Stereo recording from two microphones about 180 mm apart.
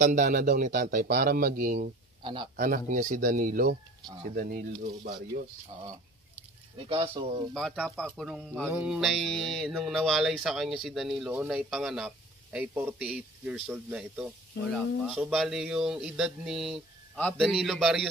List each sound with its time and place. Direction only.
0.0 s a man's voice: 50° right (ahead or behind)
2.2 s speech: 25° right (ahead or behind)
2.6 s a man's voice: 45° right (ahead or behind)
6.9 s speech: 25° right (ahead or behind)
7.5 s a man's voice: centre (ahead or behind)